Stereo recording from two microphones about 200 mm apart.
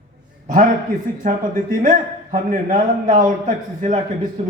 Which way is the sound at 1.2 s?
40° right (ahead or behind).